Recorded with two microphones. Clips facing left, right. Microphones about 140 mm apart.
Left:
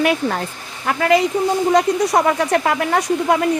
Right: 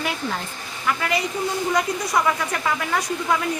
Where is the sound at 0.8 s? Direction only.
50° left (ahead or behind).